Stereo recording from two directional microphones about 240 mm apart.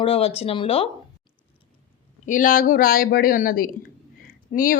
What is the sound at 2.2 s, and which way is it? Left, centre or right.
Speech, left.